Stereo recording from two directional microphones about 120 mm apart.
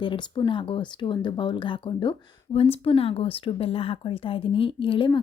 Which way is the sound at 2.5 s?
55° left (ahead or behind).